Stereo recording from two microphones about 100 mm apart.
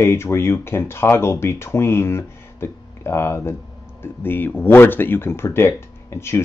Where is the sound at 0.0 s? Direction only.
25° left (ahead or behind).